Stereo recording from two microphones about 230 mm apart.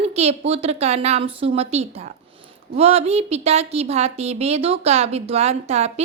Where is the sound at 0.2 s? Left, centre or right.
Right.